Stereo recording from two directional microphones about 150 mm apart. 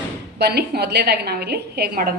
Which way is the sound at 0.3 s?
90° right.